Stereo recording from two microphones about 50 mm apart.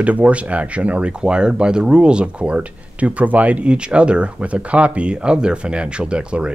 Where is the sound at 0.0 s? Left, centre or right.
Right.